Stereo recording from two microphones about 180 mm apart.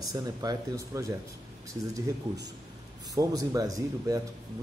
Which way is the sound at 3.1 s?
20° right (ahead or behind).